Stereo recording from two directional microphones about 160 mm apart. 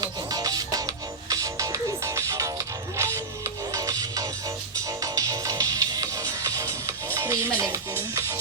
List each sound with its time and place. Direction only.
0.0 s music: 25° right (ahead or behind)